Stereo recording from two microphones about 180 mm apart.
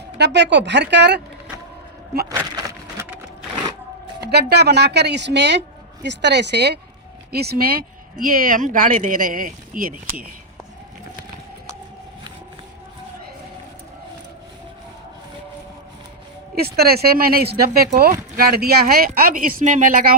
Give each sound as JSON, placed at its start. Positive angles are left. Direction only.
{"t": 0.2, "sound": "a woman's voice", "side_deg": -70}
{"t": 2.3, "sound": "a sound", "side_deg": -15}
{"t": 4.3, "sound": "a woman's voice", "side_deg": -65}
{"t": 16.6, "sound": "speech", "side_deg": -60}